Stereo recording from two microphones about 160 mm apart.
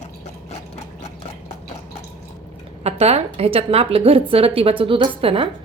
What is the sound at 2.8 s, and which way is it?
A woman's voice, 40° right (ahead or behind).